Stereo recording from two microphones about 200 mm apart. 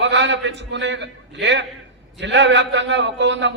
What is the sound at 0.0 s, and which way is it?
A man's voice, 60° right (ahead or behind).